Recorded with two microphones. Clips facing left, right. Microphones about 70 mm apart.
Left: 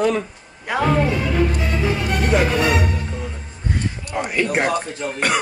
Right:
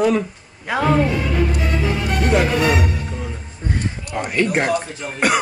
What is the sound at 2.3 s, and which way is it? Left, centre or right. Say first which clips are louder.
A woman's voice: right 1 dB; centre.